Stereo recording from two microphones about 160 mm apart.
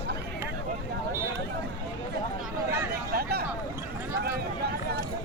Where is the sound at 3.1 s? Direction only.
75° right (ahead or behind).